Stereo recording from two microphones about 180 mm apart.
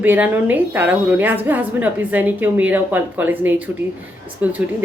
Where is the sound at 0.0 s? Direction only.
10° right (ahead or behind).